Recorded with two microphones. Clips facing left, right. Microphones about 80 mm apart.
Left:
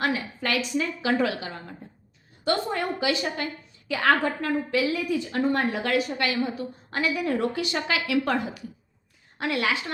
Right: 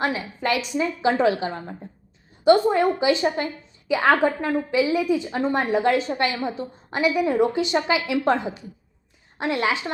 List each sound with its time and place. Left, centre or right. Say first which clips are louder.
0.0 s a woman's voice: right 2 dB; right
2.4 s a woman's voice: right 10 dB; centre